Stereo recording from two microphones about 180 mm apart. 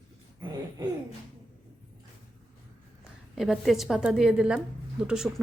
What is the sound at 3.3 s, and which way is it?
A woman's voice, centre (ahead or behind).